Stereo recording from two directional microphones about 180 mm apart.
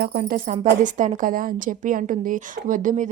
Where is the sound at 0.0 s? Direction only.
55° right (ahead or behind).